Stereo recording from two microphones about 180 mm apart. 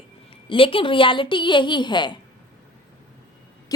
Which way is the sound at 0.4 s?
30° left (ahead or behind).